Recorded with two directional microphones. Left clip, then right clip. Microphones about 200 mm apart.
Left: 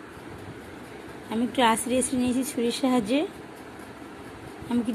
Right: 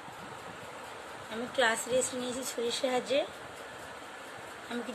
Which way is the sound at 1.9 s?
20° left (ahead or behind).